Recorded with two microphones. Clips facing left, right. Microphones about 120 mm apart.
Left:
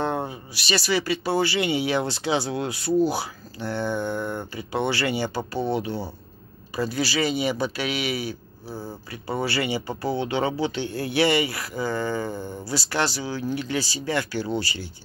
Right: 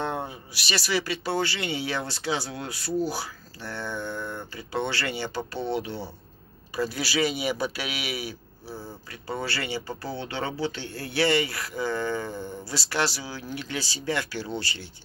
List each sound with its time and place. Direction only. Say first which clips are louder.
0.0 s speech: left 4 dB; centre (ahead or behind)
9.3 s speech: left 5 dB; 10° left (ahead or behind)